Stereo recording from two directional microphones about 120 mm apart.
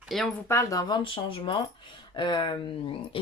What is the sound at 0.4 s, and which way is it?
Speech, 25° left (ahead or behind).